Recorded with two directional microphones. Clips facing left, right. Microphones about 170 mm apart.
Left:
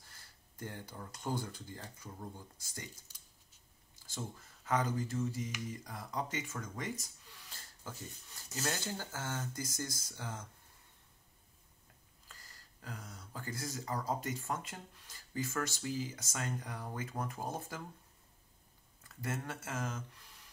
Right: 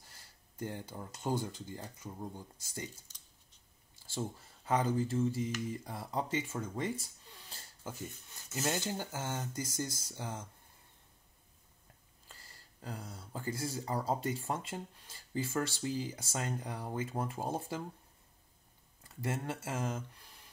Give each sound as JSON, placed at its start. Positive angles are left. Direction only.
{"t": 0.6, "sound": "speech", "side_deg": -20}
{"t": 4.1, "sound": "speech", "side_deg": -30}
{"t": 12.8, "sound": "speech", "side_deg": -30}
{"t": 19.0, "sound": "speech", "side_deg": -25}